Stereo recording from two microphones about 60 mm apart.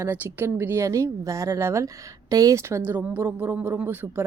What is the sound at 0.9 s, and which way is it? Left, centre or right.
Speech, right.